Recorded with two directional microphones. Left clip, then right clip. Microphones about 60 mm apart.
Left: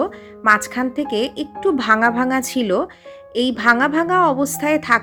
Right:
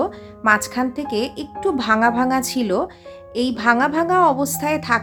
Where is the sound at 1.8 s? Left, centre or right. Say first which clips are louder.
Left 1 dB; left.